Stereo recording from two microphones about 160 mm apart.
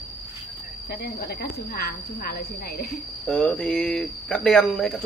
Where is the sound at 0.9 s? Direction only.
80° left.